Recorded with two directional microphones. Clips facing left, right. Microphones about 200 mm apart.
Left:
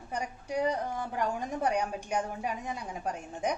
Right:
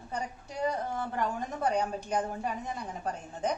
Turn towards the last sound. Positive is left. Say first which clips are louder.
# even
turn(degrees=10)  # may be behind; listen again after turning